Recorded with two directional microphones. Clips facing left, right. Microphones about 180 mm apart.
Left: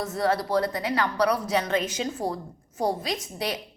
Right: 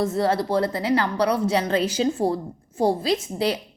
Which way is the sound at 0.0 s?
25° right (ahead or behind).